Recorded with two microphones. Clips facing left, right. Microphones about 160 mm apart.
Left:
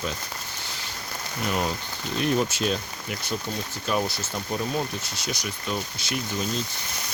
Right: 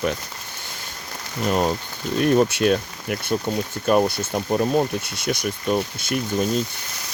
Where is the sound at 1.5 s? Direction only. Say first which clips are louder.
Right 7 dB; 40° right (ahead or behind).